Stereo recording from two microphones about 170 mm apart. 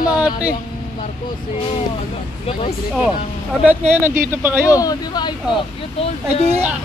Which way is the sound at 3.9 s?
15° right (ahead or behind).